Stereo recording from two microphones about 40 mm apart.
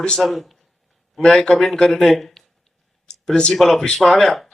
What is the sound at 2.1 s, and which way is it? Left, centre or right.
Speech, centre.